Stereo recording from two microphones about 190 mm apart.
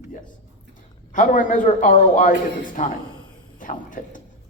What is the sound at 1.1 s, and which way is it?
A man's voice, 45° left (ahead or behind).